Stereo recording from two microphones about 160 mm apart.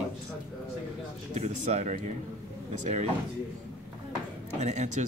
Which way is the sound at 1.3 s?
45° right (ahead or behind).